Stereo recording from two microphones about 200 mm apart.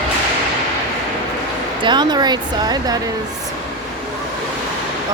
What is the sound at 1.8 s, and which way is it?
A woman's voice, 20° right (ahead or behind).